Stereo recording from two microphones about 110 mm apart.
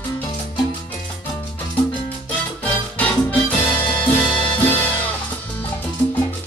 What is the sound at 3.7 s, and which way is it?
Music, 45° left (ahead or behind).